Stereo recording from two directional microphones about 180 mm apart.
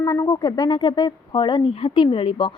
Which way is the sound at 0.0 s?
25° left (ahead or behind).